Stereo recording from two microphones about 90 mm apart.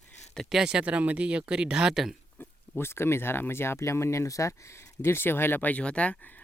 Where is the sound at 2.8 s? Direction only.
30° left (ahead or behind).